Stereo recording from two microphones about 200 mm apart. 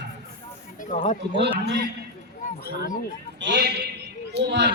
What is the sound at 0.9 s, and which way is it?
Speech, 40° left (ahead or behind).